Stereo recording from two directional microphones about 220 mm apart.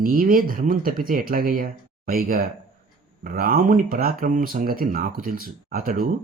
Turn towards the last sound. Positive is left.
turn(degrees=-40)  # may be behind; listen again after turning